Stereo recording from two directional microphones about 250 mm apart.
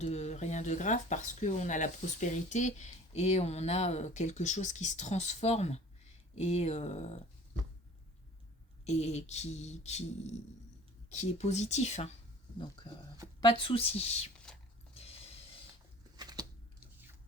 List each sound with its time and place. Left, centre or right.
0.0 s speech: left
8.8 s speech: left
13.4 s speech: left
14.3 s a sound: centre
14.9 s mechanisms: left
16.1 s a sound: centre